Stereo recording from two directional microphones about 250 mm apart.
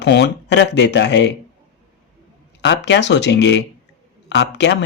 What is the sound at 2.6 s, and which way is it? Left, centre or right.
Speech, left.